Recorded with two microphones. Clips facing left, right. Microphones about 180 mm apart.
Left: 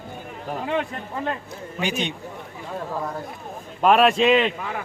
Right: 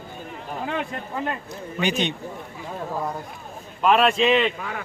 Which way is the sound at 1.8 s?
5° left (ahead or behind).